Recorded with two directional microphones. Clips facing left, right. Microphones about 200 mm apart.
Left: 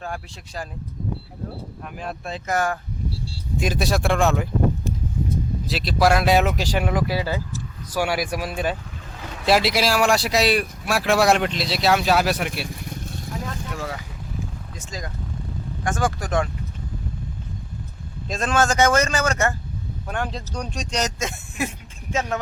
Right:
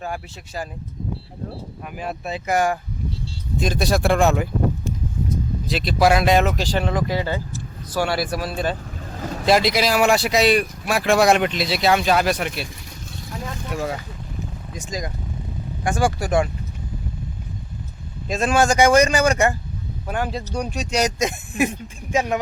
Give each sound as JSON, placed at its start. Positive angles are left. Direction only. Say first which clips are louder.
{"t": 0.0, "sound": "speech", "louder": "right 2 dB", "side_deg": -5}
{"t": 1.8, "sound": "speech", "louder": "right 3 dB", "side_deg": -5}
{"t": 3.6, "sound": "speech", "louder": "right 2 dB", "side_deg": 5}
{"t": 5.6, "sound": "speech", "louder": "right 2 dB", "side_deg": 0}
{"t": 9.1, "sound": "boat", "louder": "right 8 dB", "side_deg": -40}
{"t": 9.5, "sound": "speech", "louder": "right 1 dB", "side_deg": 5}
{"t": 14.7, "sound": "speech", "louder": "right 5 dB", "side_deg": -15}
{"t": 18.3, "sound": "speech", "louder": "right 3 dB", "side_deg": -10}